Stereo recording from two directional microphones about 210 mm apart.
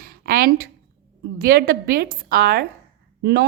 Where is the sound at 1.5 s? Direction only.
45° right (ahead or behind).